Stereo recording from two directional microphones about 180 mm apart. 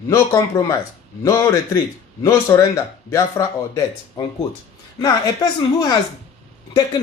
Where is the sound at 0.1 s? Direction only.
15° left (ahead or behind).